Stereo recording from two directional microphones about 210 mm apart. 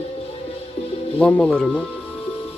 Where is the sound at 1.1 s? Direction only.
5° left (ahead or behind).